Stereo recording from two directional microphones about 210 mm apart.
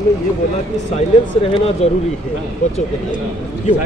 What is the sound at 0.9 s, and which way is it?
Speech, 30° left (ahead or behind).